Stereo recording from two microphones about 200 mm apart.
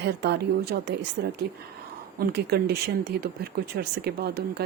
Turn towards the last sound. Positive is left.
turn(degrees=-55)  # may be behind; listen again after turning